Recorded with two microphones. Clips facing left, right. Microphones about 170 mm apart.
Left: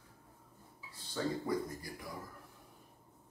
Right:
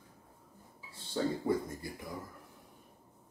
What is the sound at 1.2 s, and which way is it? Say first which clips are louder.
Speech: right 4 dB; 25° right (ahead or behind).